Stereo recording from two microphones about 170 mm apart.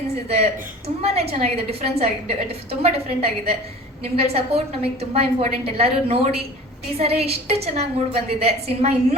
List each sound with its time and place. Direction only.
0.3 s a woman's voice: 35° right (ahead or behind)